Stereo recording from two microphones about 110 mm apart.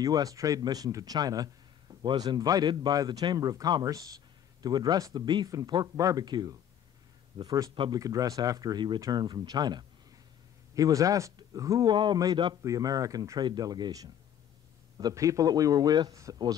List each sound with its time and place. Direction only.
0.0 s a man's voice: 35° right (ahead or behind)
7.7 s a man's voice: 50° right (ahead or behind)
8.0 s a man's voice: 35° right (ahead or behind)
11.9 s a man's voice: 40° right (ahead or behind)